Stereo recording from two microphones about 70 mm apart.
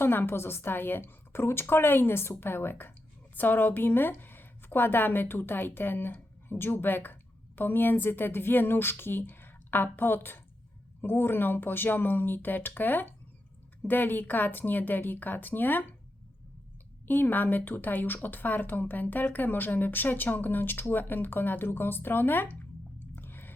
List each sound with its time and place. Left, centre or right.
0.0 s a woman's voice: left
17.1 s speech: left
23.1 s a sound: left